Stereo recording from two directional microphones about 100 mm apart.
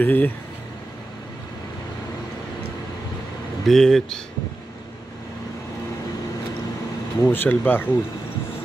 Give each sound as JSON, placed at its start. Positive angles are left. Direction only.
{"t": 0.0, "sound": "speech", "side_deg": 20}
{"t": 3.6, "sound": "speech", "side_deg": 5}
{"t": 7.2, "sound": "speech", "side_deg": 20}